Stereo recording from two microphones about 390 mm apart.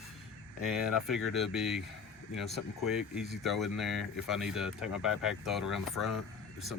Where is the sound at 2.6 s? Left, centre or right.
Left.